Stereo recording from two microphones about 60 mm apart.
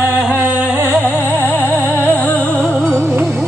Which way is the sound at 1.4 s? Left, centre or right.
Left.